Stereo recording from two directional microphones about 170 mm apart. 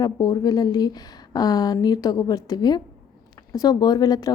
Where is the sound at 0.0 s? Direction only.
25° left (ahead or behind).